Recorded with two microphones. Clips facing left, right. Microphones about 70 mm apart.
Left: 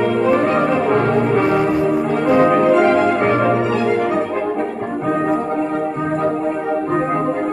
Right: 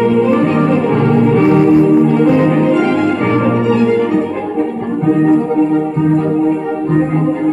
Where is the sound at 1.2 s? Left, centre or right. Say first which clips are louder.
Right 6 dB; centre.